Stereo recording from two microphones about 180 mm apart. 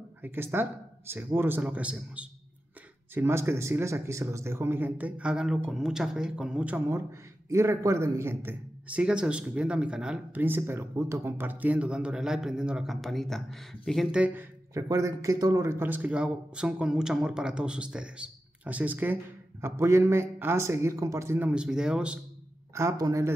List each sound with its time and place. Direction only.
0.2 s speech: 10° right (ahead or behind)
22.8 s speech: 20° right (ahead or behind)